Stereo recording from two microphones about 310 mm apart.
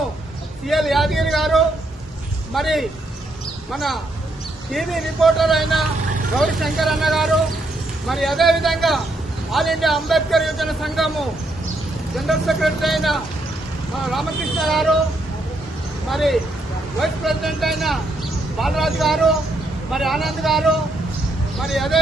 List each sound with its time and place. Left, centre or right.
0.7 s a man's voice: centre
16.0 s a man's voice: centre